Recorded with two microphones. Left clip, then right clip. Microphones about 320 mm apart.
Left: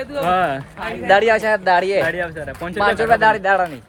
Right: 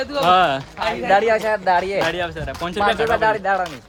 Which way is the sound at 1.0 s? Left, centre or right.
Left.